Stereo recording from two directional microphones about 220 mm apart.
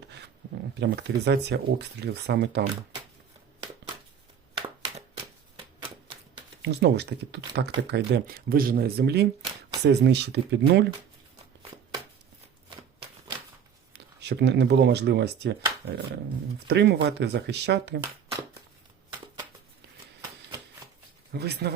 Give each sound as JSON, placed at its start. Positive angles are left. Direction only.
{"t": 0.8, "sound": "speech", "side_deg": -50}
{"t": 4.5, "sound": "a sound", "side_deg": -25}
{"t": 6.6, "sound": "speech", "side_deg": -50}
{"t": 14.2, "sound": "speech", "side_deg": -50}
{"t": 16.6, "sound": "speech", "side_deg": -50}
{"t": 21.3, "sound": "speech", "side_deg": -45}